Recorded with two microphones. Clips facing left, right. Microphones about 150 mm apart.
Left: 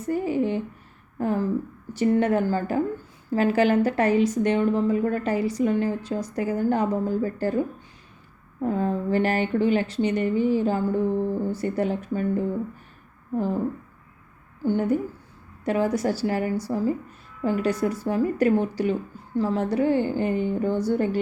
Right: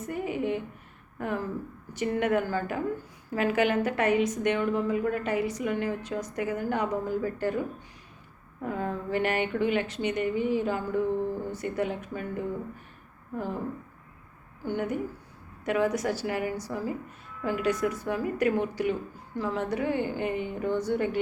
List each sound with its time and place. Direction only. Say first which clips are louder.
0.0 s a sound: left 6 dB; 30° left (ahead or behind)
1.2 s a woman's voice: left 7 dB; 30° left (ahead or behind)
8.6 s a woman's voice: left 7 dB; 30° left (ahead or behind)
14.6 s a woman's voice: left 7 dB; 30° left (ahead or behind)